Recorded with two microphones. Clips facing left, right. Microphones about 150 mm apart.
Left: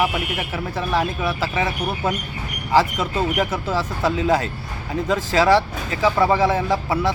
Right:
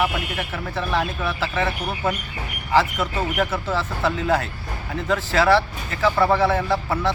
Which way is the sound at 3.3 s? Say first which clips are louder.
Left 1 dB; 10° left (ahead or behind).